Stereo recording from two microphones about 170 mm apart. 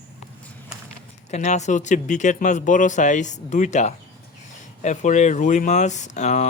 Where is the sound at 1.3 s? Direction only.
45° left (ahead or behind).